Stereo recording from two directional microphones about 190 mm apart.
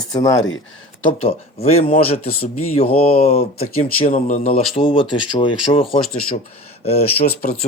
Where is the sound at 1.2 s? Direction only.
30° left (ahead or behind).